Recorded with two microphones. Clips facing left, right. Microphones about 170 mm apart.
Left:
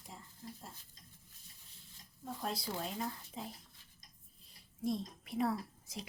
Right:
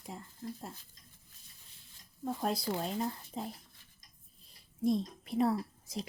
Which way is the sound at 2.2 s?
55° right (ahead or behind).